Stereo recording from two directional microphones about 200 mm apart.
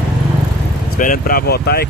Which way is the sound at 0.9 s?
45° left (ahead or behind).